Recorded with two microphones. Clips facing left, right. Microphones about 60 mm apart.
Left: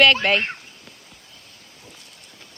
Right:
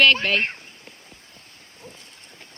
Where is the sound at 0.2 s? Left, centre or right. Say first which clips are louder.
Left 2 dB; left.